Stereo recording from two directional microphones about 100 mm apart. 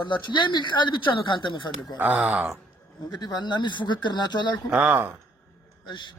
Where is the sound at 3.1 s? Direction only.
45° left (ahead or behind).